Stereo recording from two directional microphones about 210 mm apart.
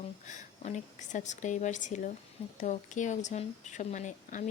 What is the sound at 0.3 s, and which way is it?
Speech, 35° left (ahead or behind).